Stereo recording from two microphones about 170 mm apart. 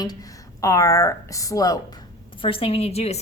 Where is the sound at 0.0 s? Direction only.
20° left (ahead or behind).